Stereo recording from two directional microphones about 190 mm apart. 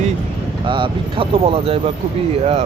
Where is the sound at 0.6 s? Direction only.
25° right (ahead or behind).